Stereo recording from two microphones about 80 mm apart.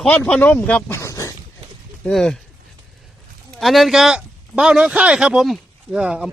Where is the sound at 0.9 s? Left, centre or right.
Left.